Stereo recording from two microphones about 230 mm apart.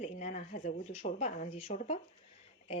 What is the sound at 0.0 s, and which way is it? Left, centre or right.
Speech, left.